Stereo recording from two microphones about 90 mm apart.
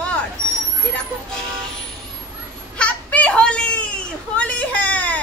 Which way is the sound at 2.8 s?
15° left (ahead or behind).